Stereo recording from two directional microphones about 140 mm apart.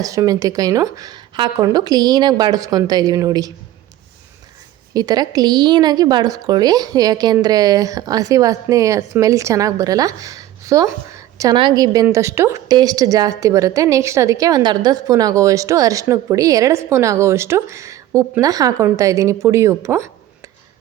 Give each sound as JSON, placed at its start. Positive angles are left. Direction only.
{"t": 0.0, "sound": "a woman's voice", "side_deg": -25}
{"t": 4.9, "sound": "a woman's voice", "side_deg": -30}